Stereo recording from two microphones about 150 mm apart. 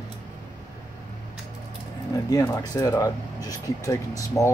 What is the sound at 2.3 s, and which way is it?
Speech, 25° left (ahead or behind).